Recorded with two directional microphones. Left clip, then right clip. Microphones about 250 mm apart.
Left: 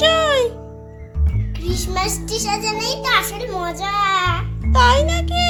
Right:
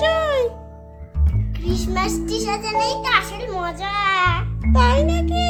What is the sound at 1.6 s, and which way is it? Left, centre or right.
A child's voice, centre.